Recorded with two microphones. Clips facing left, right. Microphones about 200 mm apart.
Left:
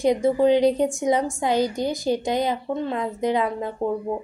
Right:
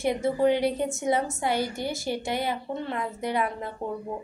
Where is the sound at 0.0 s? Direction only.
15° left (ahead or behind).